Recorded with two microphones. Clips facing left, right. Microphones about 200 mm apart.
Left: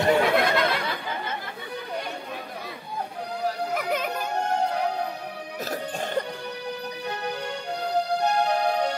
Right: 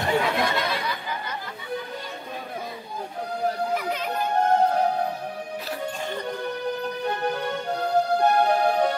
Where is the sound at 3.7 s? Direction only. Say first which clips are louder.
Left 1 dB; 55° left (ahead or behind).